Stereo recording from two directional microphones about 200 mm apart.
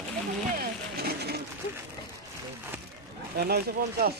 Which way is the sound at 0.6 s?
50° right (ahead or behind).